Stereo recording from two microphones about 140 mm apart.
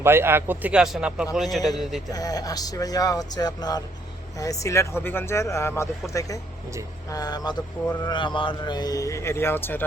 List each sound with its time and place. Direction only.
0.0 s a man's voice: 15° right (ahead or behind); by 1.7 s centre (ahead or behind)
2.1 s speech: 25° left (ahead or behind)